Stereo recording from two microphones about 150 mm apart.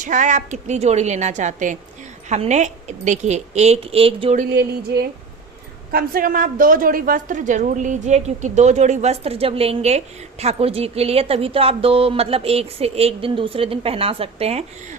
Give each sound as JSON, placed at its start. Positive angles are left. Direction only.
{"t": 0.0, "sound": "a woman's voice", "side_deg": -55}
{"t": 4.4, "sound": "a sound", "side_deg": -90}
{"t": 5.9, "sound": "a woman's voice", "side_deg": -80}